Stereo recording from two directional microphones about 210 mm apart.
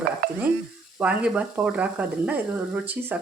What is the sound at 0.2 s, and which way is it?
Stir, 45° right (ahead or behind).